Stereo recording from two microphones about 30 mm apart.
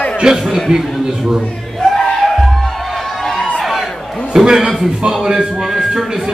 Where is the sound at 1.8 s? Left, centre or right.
Left.